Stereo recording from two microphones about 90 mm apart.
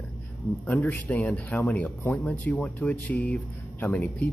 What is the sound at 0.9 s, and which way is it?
Speech, 20° left (ahead or behind).